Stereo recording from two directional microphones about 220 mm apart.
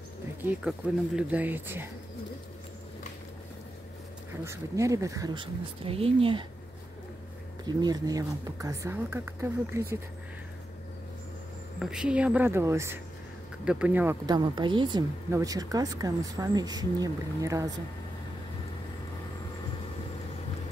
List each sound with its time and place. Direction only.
0.5 s speech: 5° right (ahead or behind)
4.5 s speech: 15° right (ahead or behind)
7.6 s speech: 20° right (ahead or behind)
11.8 s speech: 5° right (ahead or behind)
14.2 s speech: 20° right (ahead or behind)